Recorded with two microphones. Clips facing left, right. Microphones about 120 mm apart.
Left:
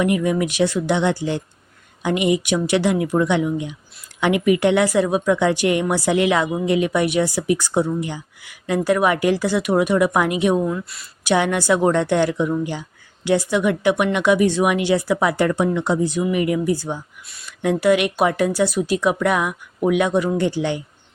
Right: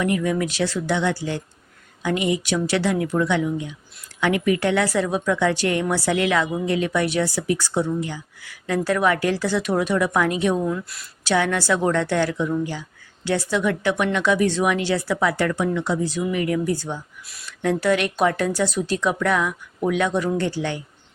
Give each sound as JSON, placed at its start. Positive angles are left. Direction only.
{"t": 0.0, "sound": "speech", "side_deg": 15}
{"t": 11.2, "sound": "a woman's voice", "side_deg": 15}